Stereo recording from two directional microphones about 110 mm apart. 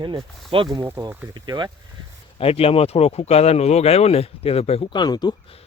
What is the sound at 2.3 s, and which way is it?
Speech, 60° left (ahead or behind).